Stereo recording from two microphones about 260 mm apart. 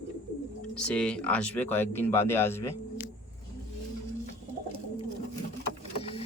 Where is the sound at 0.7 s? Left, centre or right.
Centre.